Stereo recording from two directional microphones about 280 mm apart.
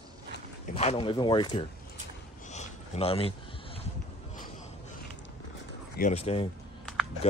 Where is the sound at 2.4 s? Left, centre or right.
Left.